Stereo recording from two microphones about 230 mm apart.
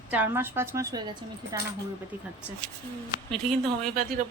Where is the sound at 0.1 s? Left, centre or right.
Centre.